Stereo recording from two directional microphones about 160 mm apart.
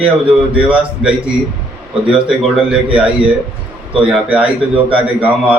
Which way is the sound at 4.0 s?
5° right (ahead or behind).